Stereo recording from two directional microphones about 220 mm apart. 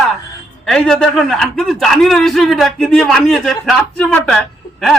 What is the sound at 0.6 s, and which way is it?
A man's voice, 5° left (ahead or behind).